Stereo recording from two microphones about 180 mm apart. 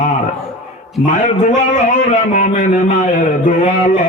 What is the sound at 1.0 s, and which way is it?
Music, 45° left (ahead or behind).